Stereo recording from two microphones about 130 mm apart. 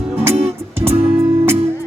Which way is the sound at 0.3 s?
55° right (ahead or behind).